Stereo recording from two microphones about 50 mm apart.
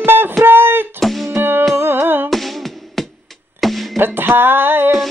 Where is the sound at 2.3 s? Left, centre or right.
Centre.